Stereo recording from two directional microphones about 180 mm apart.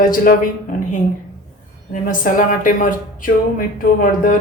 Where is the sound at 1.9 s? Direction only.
45° left (ahead or behind).